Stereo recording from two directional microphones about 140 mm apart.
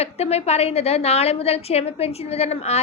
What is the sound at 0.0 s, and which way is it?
A woman's voice, 50° left (ahead or behind).